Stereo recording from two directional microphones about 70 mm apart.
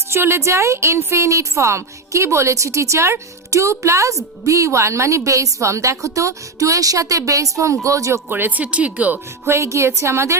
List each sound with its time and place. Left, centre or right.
0.1 s a woman's voice: right
8.3 s speech: right
9.5 s a woman's voice: right